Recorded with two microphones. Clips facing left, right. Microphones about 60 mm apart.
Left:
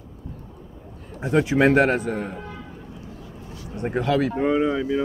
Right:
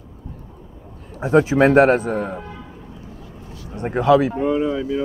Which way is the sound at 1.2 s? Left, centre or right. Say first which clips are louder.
Right 4 dB; right.